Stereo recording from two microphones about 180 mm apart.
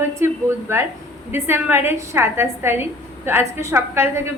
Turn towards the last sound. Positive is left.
turn(degrees=-15)  # may be behind; listen again after turning